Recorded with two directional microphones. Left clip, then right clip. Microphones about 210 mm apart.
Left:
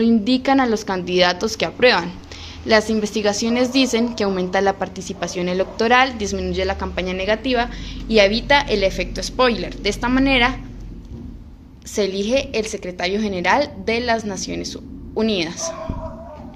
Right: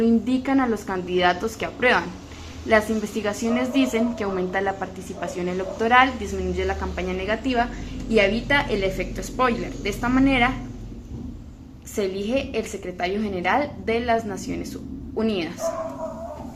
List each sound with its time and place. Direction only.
0.0 s a woman's voice: 50° left (ahead or behind)
11.9 s a woman's voice: 45° left (ahead or behind)